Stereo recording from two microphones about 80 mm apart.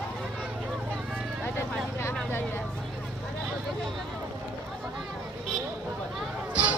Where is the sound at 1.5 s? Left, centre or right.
Left.